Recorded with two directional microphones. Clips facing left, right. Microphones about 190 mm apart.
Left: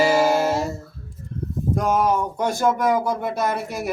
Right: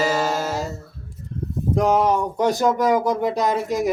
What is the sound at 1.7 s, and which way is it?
Speech, 15° right (ahead or behind).